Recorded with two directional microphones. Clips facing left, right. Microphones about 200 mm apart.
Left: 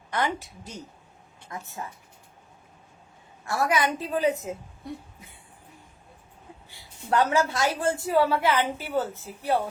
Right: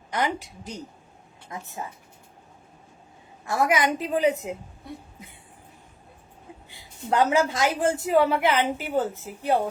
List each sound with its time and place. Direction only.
0.1 s a woman's voice: 15° right (ahead or behind)
3.5 s a woman's voice: 20° right (ahead or behind)
6.7 s a woman's voice: 20° right (ahead or behind)